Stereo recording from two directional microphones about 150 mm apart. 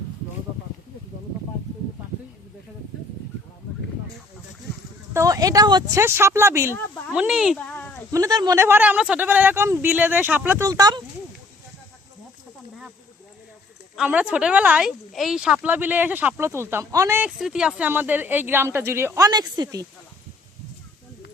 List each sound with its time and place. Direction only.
5.1 s speech: 20° right (ahead or behind)
7.1 s speech: 5° right (ahead or behind)
8.1 s speech: 25° right (ahead or behind)
10.7 s speech: 25° right (ahead or behind)
13.9 s speech: 5° right (ahead or behind); by 19.9 s 25° right (ahead or behind)